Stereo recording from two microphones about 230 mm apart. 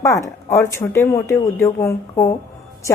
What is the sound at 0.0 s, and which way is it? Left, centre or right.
Speech, centre.